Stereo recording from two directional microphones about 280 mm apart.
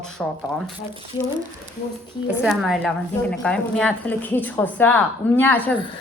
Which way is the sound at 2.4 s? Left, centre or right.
Centre.